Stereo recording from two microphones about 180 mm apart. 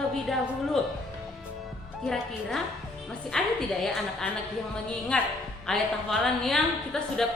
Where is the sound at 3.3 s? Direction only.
5° left (ahead or behind).